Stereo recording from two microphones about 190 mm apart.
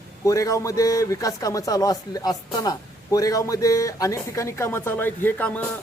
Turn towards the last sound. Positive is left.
turn(degrees=10)  # may be behind; listen again after turning